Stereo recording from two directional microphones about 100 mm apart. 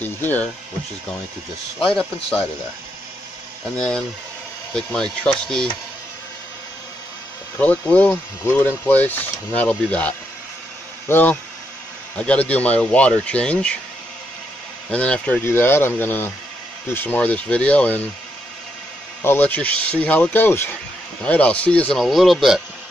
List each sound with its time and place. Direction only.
0.0 s speech: 20° left (ahead or behind)
1.9 s speech: 5° left (ahead or behind)
3.7 s speech: 10° left (ahead or behind)
7.5 s speech: 15° left (ahead or behind)
14.9 s speech: 10° left (ahead or behind)
15.4 s speech: 25° left (ahead or behind)
19.2 s speech: 20° left (ahead or behind)
22.0 s speech: centre (ahead or behind)